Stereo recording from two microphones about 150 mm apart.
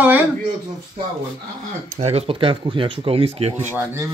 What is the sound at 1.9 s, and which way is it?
Speech, 45° right (ahead or behind).